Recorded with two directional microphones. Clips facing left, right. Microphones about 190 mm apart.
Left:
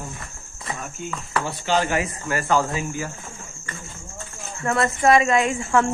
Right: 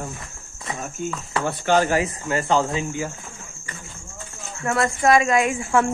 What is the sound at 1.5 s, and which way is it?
Speech, 55° right (ahead or behind).